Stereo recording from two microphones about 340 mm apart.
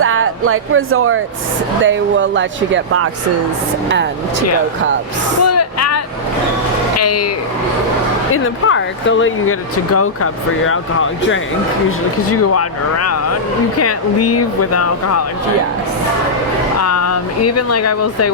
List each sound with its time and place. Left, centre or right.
0.0 s speech: right
5.4 s vehicle: left
7.0 s speech: left
8.3 s speech: left
16.8 s speech: left